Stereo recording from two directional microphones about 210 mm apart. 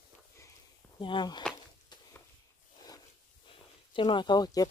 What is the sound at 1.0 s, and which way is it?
Speech, 20° left (ahead or behind).